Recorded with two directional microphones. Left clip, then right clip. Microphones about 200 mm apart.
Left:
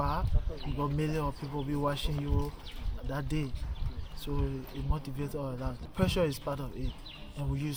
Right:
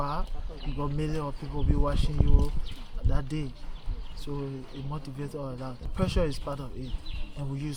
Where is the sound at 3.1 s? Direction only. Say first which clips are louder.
Even; 5° right (ahead or behind).